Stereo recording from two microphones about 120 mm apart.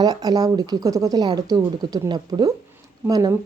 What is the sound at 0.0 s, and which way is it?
Speech, 35° right (ahead or behind).